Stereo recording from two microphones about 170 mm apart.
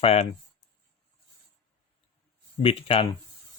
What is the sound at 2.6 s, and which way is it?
Speech, 30° left (ahead or behind).